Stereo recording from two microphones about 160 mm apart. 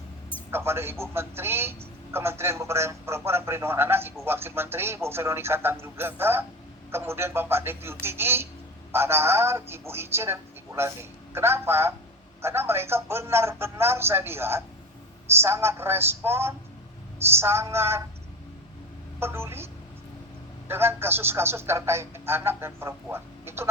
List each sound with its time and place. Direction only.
0.5 s a man's voice: 15° right (ahead or behind)
19.2 s a man's voice: 15° right (ahead or behind)